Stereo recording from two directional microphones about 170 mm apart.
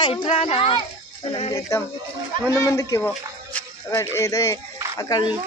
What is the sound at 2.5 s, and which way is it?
A woman's voice, 20° left (ahead or behind).